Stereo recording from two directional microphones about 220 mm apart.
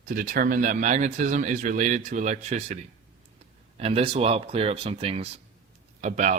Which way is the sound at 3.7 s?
25° right (ahead or behind).